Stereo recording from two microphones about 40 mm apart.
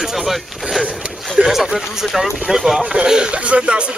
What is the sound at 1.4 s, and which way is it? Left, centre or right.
Speech, right.